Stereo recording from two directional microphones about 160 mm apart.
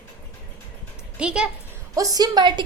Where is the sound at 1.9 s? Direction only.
20° right (ahead or behind).